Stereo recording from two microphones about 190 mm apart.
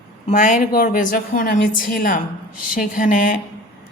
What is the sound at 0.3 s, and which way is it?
A woman's voice, 40° left (ahead or behind).